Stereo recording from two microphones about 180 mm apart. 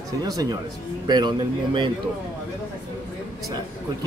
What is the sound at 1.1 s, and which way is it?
Speech, 25° right (ahead or behind).